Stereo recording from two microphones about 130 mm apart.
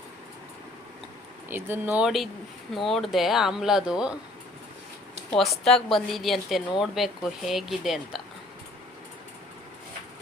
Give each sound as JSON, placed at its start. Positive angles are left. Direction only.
{"t": 1.5, "sound": "speech", "side_deg": -15}
{"t": 2.0, "sound": "a woman's voice", "side_deg": 0}
{"t": 5.4, "sound": "a woman's voice", "side_deg": 0}